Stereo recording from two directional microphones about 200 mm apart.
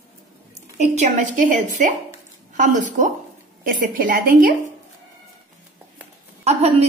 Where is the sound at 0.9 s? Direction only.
40° right (ahead or behind).